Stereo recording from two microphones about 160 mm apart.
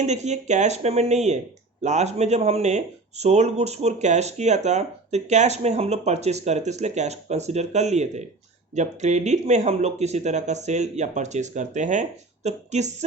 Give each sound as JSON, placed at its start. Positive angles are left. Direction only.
{"t": 0.0, "sound": "speech", "side_deg": -45}